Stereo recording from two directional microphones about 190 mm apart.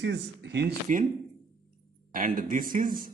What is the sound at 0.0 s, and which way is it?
Speech, 65° right (ahead or behind).